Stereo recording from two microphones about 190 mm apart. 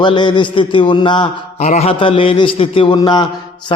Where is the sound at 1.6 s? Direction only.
35° left (ahead or behind).